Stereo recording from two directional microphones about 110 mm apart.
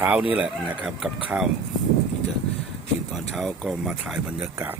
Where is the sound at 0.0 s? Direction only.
15° right (ahead or behind).